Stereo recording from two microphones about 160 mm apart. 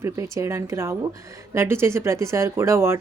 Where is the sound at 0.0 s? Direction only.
15° right (ahead or behind).